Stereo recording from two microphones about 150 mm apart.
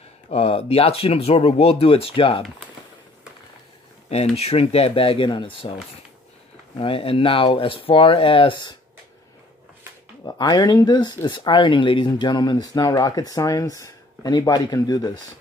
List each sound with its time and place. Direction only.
0.3 s speech: 40° left (ahead or behind)
4.1 s speech: 45° left (ahead or behind)
6.8 s speech: 35° left (ahead or behind)
10.2 s speech: 25° left (ahead or behind)